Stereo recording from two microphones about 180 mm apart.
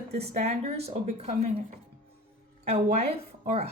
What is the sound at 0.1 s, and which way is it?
Speech, 35° right (ahead or behind).